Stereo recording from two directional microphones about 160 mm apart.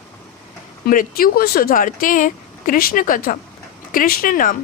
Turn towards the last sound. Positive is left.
turn(degrees=60)  # may be behind; listen again after turning